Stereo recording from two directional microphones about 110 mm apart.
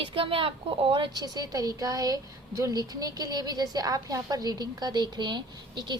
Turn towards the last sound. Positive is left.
turn(degrees=-45)  # may be behind; listen again after turning